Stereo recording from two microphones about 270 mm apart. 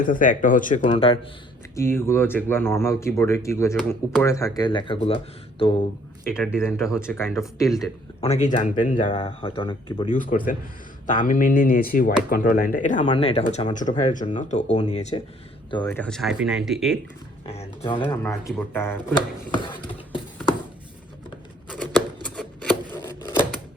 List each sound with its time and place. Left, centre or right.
0.0 s speech: left
1.7 s speech: centre
8.2 s speech: left
10.2 s speech: left; by 17.0 s centre
17.4 s speech: left
18.0 s speech: centre
19.9 s a sound: centre
22.9 s a sound: centre